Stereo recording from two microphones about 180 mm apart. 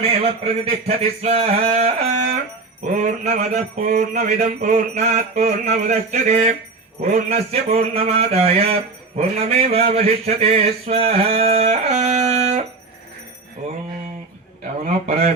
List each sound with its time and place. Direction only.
0.0 s mantra: 30° right (ahead or behind)
14.8 s mantra: 40° right (ahead or behind)